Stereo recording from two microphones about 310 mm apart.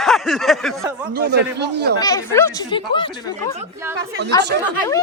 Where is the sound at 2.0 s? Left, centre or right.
Centre.